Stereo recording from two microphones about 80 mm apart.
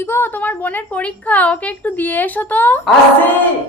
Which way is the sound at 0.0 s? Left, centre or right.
Left.